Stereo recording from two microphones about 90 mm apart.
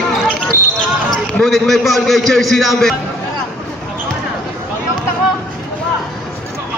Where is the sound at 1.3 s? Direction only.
5° left (ahead or behind).